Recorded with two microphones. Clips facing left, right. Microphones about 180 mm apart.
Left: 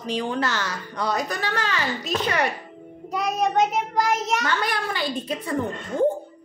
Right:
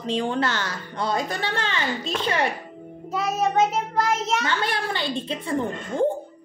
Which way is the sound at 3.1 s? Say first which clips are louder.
Even; 5° right (ahead or behind).